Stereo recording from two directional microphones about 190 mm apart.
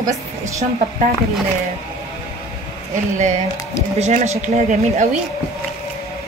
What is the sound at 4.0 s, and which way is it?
Speech, 40° right (ahead or behind).